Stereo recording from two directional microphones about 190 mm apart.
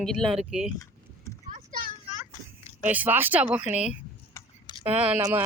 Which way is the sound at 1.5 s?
45° right (ahead or behind).